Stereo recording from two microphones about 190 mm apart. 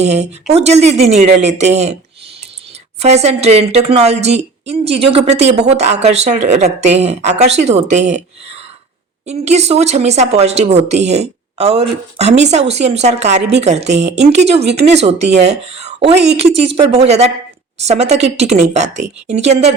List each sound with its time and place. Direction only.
0.0 s speech: 35° right (ahead or behind)
3.0 s speech: 35° right (ahead or behind)